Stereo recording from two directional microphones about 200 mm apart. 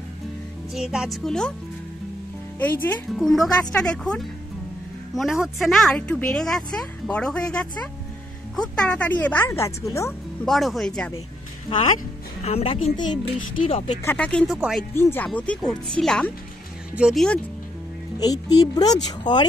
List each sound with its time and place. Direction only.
0.7 s speech: 5° right (ahead or behind)
2.6 s speech: 10° left (ahead or behind)
10.4 s speech: centre (ahead or behind)
12.4 s speech: 30° left (ahead or behind)
14.0 s speech: 5° left (ahead or behind)
15.0 s speech: 10° left (ahead or behind)
18.2 s speech: 20° left (ahead or behind)